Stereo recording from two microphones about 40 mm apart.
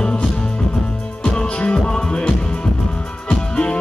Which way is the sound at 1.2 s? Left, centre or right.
Left.